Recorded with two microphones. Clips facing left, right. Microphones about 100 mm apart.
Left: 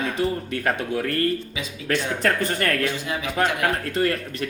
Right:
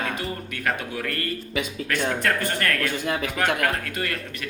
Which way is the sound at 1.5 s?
55° right (ahead or behind).